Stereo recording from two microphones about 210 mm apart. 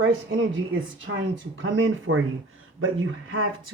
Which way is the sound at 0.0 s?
65° right (ahead or behind).